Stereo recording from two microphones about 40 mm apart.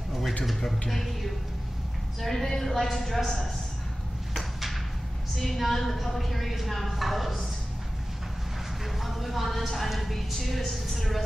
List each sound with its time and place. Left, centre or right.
0.5 s a woman's voice: centre
2.2 s a woman's voice: centre
4.3 s a sound: centre
5.4 s a woman's voice: centre
8.8 s a woman's voice: centre